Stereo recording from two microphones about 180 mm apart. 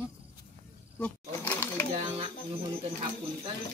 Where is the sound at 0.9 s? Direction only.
5° left (ahead or behind).